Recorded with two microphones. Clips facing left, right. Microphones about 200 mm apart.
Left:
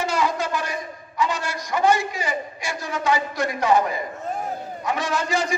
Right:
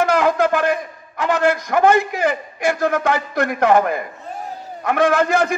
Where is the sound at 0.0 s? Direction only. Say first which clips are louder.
Right 7 dB; 55° right (ahead or behind).